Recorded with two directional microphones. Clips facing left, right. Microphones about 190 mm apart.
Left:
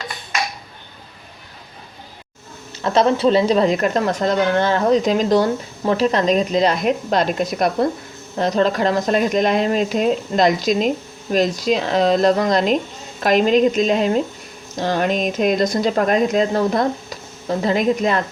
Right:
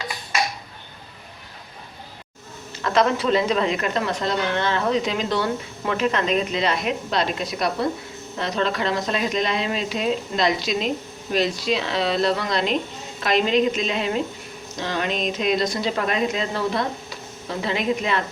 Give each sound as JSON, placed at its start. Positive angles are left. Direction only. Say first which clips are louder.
{"t": 2.8, "sound": "speech", "louder": "left 5 dB", "side_deg": 30}